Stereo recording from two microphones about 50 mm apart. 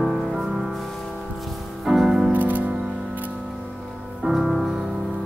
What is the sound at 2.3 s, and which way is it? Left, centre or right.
Music, right.